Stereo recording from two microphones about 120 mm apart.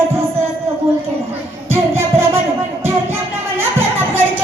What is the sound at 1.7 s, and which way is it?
Music, 20° right (ahead or behind).